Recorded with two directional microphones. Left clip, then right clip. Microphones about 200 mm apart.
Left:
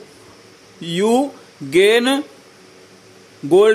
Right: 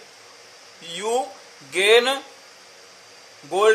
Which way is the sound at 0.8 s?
35° left (ahead or behind).